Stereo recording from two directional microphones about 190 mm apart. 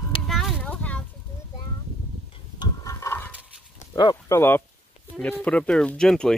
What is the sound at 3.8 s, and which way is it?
Speech, 20° left (ahead or behind).